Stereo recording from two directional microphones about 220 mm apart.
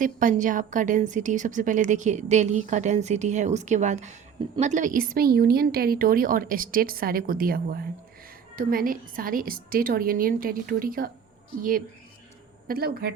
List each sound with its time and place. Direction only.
0.0 s a woman's voice: 35° right (ahead or behind)
12.6 s speech: 45° right (ahead or behind)